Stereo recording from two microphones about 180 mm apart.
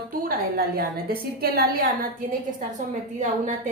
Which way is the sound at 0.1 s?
50° right (ahead or behind).